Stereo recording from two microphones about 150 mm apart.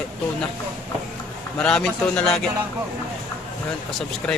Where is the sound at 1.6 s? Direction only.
5° left (ahead or behind).